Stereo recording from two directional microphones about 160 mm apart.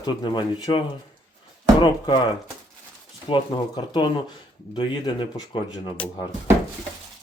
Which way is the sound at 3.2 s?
30° left (ahead or behind).